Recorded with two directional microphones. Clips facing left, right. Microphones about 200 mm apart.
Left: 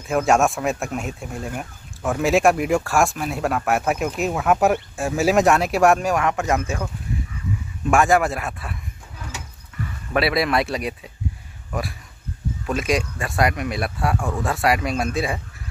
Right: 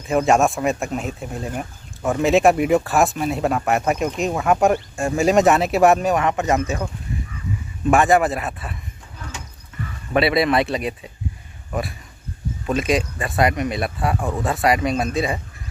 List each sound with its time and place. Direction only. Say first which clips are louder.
0.0 s speech: right 1 dB; centre (ahead or behind)
7.9 s speech: right 2 dB; centre (ahead or behind)
10.1 s speech: right 3 dB; centre (ahead or behind)
14.1 s speech: right 1 dB; 15° right (ahead or behind)
14.4 s speech: right 2 dB; centre (ahead or behind)